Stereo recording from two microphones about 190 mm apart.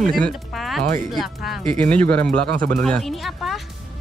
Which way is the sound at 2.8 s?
5° left (ahead or behind).